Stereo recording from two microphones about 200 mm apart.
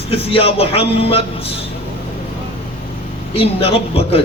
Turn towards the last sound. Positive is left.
turn(degrees=30)  # may be behind; listen again after turning